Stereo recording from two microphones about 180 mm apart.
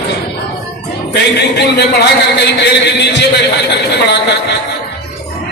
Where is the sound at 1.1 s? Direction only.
65° left (ahead or behind).